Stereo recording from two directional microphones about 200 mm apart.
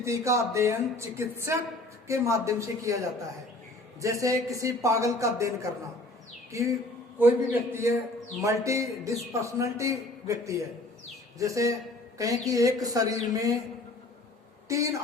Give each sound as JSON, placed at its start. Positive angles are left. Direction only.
{"t": 0.0, "sound": "a man's voice", "side_deg": -15}
{"t": 14.7, "sound": "a man's voice", "side_deg": -15}